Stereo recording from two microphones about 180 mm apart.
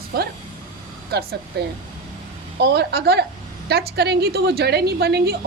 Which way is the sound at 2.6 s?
65° right (ahead or behind).